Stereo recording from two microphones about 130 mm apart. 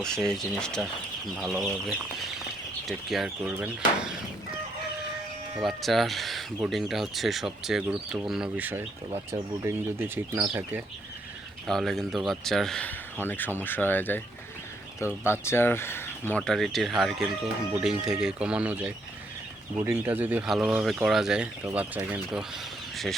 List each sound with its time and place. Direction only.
0.0 s speech: 5° left (ahead or behind)
5.5 s speech: centre (ahead or behind)
11.7 s speech: centre (ahead or behind)
13.1 s speech: 15° left (ahead or behind)
15.2 s speech: 20° left (ahead or behind)
16.4 s speech: 5° left (ahead or behind)